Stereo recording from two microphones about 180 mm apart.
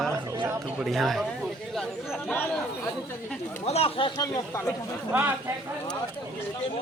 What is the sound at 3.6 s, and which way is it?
Speech, 35° left (ahead or behind).